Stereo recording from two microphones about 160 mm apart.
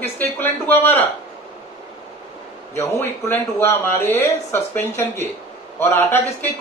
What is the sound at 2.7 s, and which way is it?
A man's voice, 15° left (ahead or behind).